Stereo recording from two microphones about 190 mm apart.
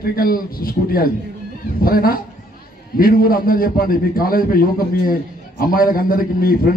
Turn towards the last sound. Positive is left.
turn(degrees=50)  # may be behind; listen again after turning